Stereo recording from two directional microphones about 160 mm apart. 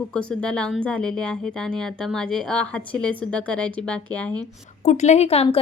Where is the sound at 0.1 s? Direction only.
5° left (ahead or behind).